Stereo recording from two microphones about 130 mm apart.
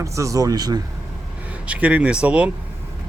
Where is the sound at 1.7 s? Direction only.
10° right (ahead or behind).